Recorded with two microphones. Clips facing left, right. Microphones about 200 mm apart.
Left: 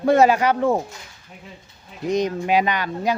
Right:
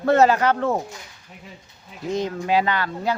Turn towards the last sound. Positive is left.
turn(degrees=15)  # may be behind; listen again after turning